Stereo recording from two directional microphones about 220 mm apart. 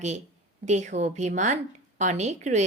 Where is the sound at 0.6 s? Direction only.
30° right (ahead or behind).